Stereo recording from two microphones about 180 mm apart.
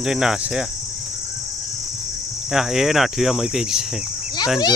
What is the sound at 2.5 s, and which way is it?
Speech, centre (ahead or behind).